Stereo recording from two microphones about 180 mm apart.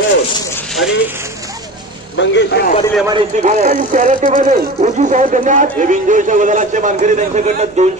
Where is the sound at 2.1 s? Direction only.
70° left (ahead or behind).